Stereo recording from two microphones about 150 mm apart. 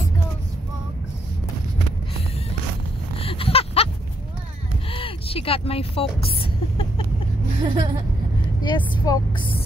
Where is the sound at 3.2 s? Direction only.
40° left (ahead or behind).